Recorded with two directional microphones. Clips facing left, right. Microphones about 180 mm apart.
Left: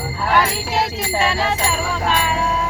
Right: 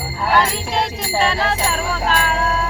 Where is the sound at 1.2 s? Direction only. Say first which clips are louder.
Right 1 dB; 5° left (ahead or behind).